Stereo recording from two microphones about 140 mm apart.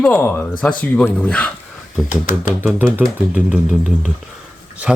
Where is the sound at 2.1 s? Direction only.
85° left.